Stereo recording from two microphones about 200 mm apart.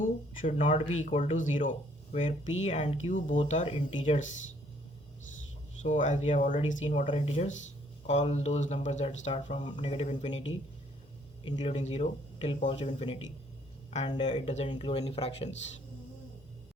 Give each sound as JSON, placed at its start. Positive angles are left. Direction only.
{"t": 0.0, "sound": "speech", "side_deg": 40}
{"t": 5.8, "sound": "speech", "side_deg": 35}
{"t": 11.4, "sound": "speech", "side_deg": 30}
{"t": 14.7, "sound": "speech", "side_deg": 25}